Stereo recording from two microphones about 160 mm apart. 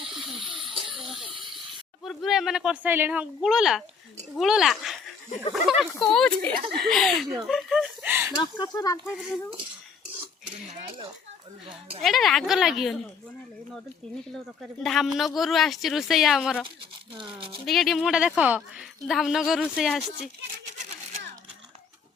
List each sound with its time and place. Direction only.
0.4 s a sound: 30° right (ahead or behind)
1.0 s a sound: centre (ahead or behind)
2.0 s speech: centre (ahead or behind)
8.4 s speech: 25° left (ahead or behind)
10.7 s speech: 35° right (ahead or behind)
12.0 s speech: centre (ahead or behind)
14.6 s speech: centre (ahead or behind)
17.7 s speech: centre (ahead or behind)